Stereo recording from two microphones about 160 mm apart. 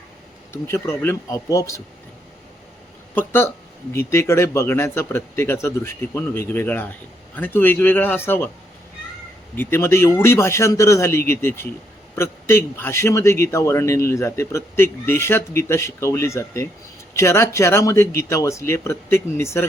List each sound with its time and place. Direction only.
0.5 s speech: 15° left (ahead or behind)
3.2 s a man's voice: 15° left (ahead or behind)
9.6 s a man's voice: 15° left (ahead or behind)